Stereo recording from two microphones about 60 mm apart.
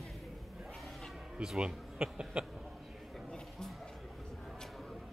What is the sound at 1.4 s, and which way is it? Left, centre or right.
A man's voice, centre.